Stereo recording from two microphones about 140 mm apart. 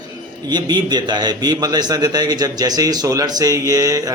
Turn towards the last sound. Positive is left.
turn(degrees=-25)  # may be behind; listen again after turning